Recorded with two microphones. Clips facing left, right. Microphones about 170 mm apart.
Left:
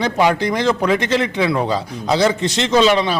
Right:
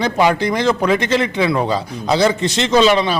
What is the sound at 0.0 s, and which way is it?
Speech, 15° right (ahead or behind).